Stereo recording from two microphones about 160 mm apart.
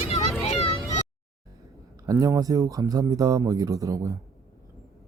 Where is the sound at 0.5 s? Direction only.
40° left (ahead or behind).